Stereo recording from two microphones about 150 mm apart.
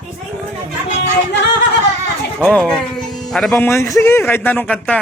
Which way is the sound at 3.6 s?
20° left (ahead or behind).